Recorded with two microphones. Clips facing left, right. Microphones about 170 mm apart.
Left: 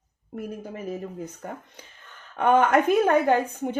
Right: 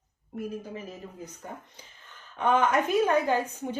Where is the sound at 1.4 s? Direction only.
60° left (ahead or behind).